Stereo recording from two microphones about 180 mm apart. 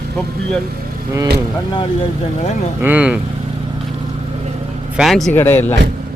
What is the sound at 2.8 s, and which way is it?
Speech, 10° right (ahead or behind).